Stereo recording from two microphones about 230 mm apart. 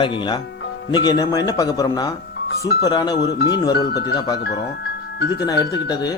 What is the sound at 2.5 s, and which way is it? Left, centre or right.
Speech, left.